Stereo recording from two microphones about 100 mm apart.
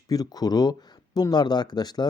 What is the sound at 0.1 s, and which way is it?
Speech, 40° left (ahead or behind).